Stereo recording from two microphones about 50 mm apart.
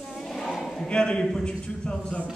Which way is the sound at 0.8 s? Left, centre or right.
Centre.